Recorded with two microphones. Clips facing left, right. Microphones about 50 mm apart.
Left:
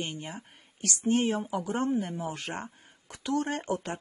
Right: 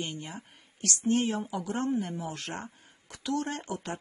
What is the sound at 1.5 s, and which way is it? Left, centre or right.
Speech, left.